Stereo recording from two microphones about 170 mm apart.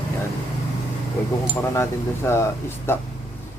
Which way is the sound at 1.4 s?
15° left (ahead or behind).